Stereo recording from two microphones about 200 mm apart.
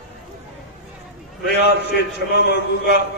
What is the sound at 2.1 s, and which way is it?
Speech, 55° left (ahead or behind).